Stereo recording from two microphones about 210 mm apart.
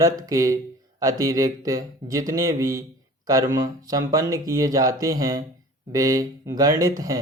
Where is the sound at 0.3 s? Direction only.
15° right (ahead or behind).